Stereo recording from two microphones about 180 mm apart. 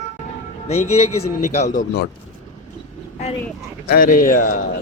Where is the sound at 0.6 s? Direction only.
35° left (ahead or behind).